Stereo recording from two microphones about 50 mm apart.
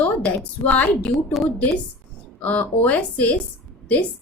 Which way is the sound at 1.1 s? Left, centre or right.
Centre.